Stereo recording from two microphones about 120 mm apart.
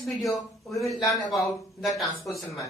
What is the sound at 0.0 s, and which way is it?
A man's voice, centre (ahead or behind).